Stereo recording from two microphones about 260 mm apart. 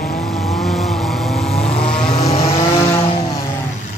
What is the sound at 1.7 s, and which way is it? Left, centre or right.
Vehicle, left.